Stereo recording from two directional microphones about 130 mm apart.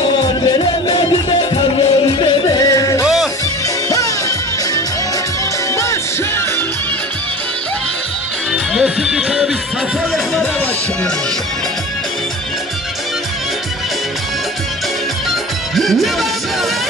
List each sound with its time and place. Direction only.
1.8 s music: 40° left (ahead or behind); by 3.1 s 25° left (ahead or behind)
5.8 s music: 20° left (ahead or behind)
8.7 s music: 5° right (ahead or behind)
15.7 s music: centre (ahead or behind)